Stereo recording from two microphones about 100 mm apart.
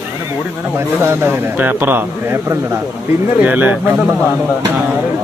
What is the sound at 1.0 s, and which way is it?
A man's voice, 25° right (ahead or behind).